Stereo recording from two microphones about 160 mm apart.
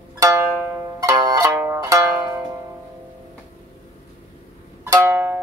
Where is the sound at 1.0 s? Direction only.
25° right (ahead or behind).